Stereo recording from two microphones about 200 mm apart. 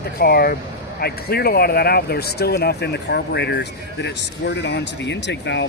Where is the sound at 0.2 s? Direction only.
50° left (ahead or behind).